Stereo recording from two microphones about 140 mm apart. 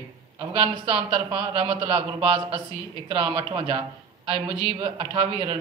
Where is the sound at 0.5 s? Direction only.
40° right (ahead or behind).